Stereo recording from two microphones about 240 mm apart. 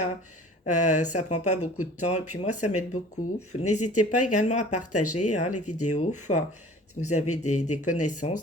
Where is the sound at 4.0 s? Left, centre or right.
Left.